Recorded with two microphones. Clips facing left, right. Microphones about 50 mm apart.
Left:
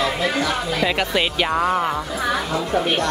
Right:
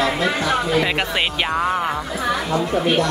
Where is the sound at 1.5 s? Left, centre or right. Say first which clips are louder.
Left 1 dB; centre.